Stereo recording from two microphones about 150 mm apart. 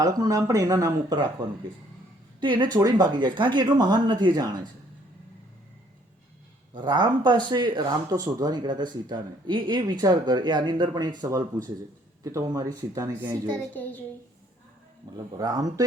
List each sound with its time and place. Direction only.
0.0 s speech: 25° right (ahead or behind)
2.4 s speech: 30° right (ahead or behind)
6.7 s speech: 30° right (ahead or behind); by 13.6 s 15° right (ahead or behind)
15.4 s speech: 25° right (ahead or behind)